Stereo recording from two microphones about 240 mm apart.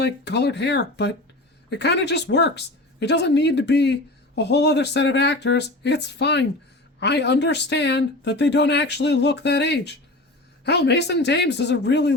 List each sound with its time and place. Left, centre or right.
0.0 s speech: left